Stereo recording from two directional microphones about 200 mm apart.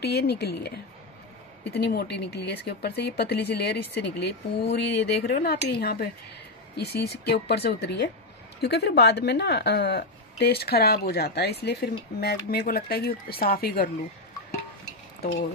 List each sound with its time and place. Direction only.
0.0 s speech: 55° left (ahead or behind)